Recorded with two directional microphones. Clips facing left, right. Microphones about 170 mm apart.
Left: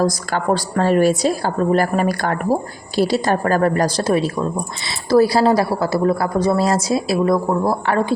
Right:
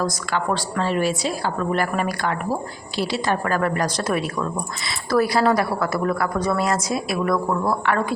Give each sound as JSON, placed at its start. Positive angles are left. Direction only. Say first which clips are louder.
{"t": 0.0, "sound": "a woman's voice", "louder": "left 5 dB", "side_deg": 40}